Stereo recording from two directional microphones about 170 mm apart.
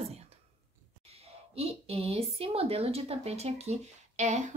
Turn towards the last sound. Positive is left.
turn(degrees=-45)  # may be behind; listen again after turning